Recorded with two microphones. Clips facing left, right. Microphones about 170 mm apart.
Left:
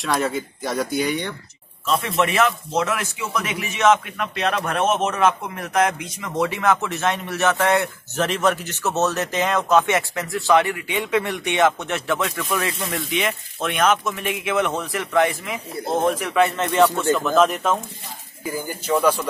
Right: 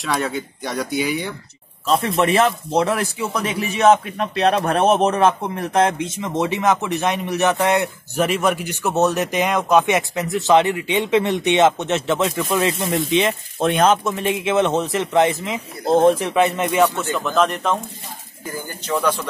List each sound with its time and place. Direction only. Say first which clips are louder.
0.0 s speech: even; centre (ahead or behind)
1.9 s a man's voice: right 4 dB; 30° right (ahead or behind); by 16.9 s 10° right (ahead or behind)
17.0 s speech: left 2 dB; centre (ahead or behind)